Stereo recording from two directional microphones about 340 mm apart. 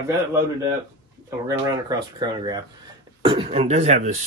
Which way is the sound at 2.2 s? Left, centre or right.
Centre.